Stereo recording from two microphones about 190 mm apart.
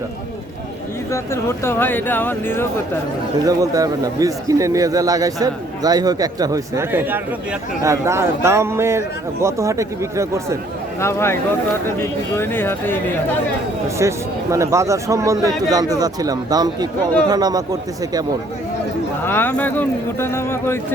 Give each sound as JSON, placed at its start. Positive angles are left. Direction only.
{"t": 1.1, "sound": "speech", "side_deg": 15}
{"t": 3.4, "sound": "a man's voice", "side_deg": -20}
{"t": 11.0, "sound": "speech", "side_deg": 15}
{"t": 12.4, "sound": "speech", "side_deg": 10}
{"t": 14.0, "sound": "a man's voice", "side_deg": -15}
{"t": 19.2, "sound": "speech", "side_deg": 10}